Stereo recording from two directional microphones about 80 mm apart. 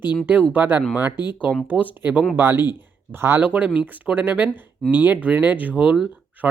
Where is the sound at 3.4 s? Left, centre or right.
Centre.